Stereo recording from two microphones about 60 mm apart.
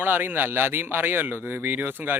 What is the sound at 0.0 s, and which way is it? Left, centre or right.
Speech, right.